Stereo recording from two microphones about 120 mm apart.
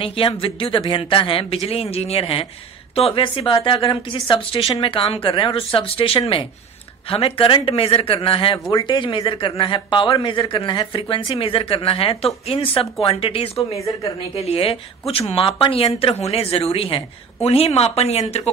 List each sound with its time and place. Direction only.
0.0 s a man's voice: 50° left (ahead or behind)
13.7 s speech: 25° left (ahead or behind)
14.3 s speech: 55° left (ahead or behind)